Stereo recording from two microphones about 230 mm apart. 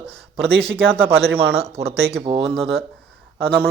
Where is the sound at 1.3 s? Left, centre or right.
Right.